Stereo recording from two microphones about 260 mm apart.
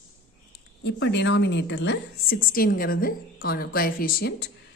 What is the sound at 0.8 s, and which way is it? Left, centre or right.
A woman's voice, left.